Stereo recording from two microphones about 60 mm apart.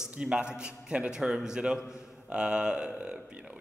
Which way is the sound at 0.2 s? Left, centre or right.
Centre.